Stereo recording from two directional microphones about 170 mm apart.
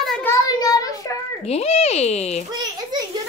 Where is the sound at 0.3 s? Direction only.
20° left (ahead or behind).